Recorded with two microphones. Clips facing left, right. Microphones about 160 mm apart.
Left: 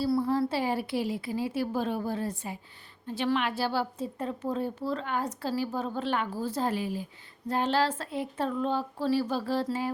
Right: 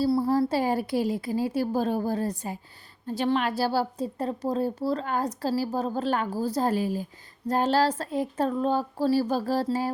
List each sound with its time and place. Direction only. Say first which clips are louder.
0.1 s a woman's voice: right 3 dB; 35° right (ahead or behind)